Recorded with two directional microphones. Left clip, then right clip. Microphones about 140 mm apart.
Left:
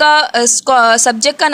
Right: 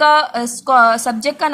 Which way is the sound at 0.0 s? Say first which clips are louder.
Left 3 dB; 45° left (ahead or behind).